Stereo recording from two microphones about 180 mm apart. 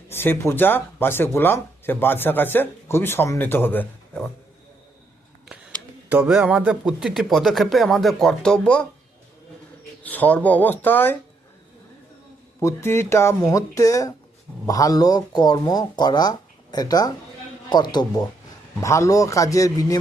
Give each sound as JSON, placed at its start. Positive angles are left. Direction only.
{"t": 0.1, "sound": "speech", "side_deg": 10}
{"t": 6.1, "sound": "speech", "side_deg": -5}
{"t": 10.0, "sound": "speech", "side_deg": 10}
{"t": 12.6, "sound": "speech", "side_deg": 15}